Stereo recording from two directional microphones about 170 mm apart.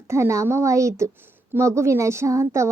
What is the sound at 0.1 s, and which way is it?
A woman's voice, 15° right (ahead or behind).